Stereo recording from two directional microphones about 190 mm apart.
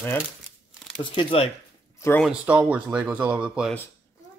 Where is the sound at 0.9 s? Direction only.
30° left (ahead or behind).